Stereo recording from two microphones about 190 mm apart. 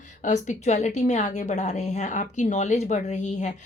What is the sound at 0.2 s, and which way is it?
Speech, 40° left (ahead or behind).